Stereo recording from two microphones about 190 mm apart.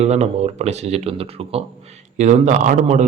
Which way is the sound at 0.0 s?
35° right (ahead or behind).